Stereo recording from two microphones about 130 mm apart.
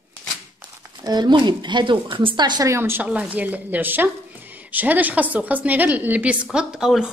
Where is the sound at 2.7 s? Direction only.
15° right (ahead or behind).